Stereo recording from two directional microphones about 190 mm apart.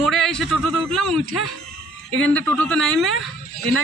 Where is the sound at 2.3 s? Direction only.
5° left (ahead or behind).